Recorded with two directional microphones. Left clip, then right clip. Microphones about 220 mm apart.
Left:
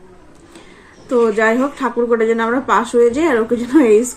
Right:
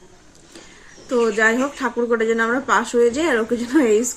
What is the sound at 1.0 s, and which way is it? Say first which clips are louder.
A woman's voice: left 3 dB; 5° right (ahead or behind).